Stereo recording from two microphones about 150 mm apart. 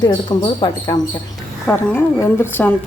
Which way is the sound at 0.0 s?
30° left (ahead or behind).